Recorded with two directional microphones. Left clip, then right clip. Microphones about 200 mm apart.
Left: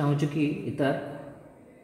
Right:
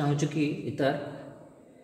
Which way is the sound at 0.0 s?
25° left (ahead or behind).